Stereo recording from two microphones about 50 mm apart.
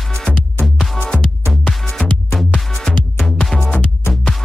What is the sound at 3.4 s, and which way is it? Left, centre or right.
Music, centre.